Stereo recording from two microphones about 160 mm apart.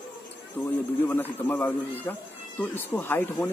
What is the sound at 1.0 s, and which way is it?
Speech, 10° left (ahead or behind).